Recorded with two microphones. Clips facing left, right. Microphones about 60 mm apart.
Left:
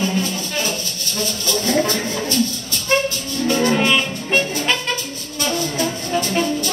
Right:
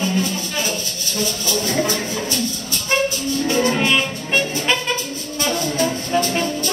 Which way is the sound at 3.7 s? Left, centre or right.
Centre.